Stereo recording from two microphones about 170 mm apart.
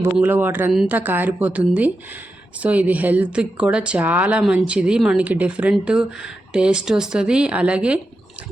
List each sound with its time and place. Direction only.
0.0 s speech: 10° right (ahead or behind)